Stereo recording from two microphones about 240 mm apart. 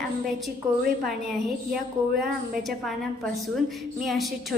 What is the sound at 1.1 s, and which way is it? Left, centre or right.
Speech, centre.